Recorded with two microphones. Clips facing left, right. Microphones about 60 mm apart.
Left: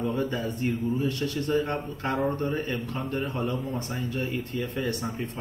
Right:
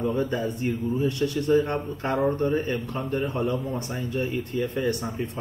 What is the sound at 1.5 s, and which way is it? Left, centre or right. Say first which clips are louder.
Speech: right 5 dB; centre.